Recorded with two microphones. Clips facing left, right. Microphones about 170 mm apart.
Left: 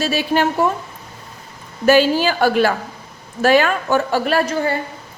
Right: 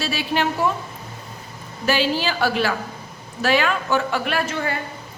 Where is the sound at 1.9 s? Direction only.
45° left (ahead or behind).